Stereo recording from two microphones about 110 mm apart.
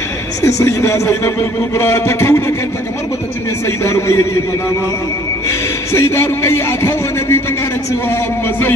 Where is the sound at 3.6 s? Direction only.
25° left (ahead or behind).